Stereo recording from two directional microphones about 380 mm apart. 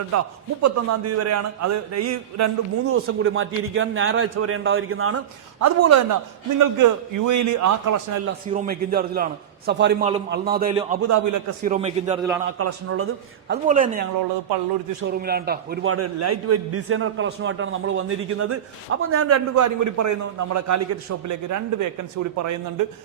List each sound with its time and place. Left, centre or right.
0.1 s a man's voice: right
5.5 s a man's voice: right
8.5 s a man's voice: right
11.1 s a man's voice: right
11.6 s a man's voice: centre
12.5 s a man's voice: right
13.5 s a man's voice: right